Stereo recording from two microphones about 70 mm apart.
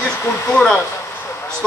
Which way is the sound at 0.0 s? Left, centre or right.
Centre.